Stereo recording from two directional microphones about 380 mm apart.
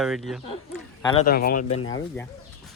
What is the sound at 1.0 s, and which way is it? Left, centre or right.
Speech, centre.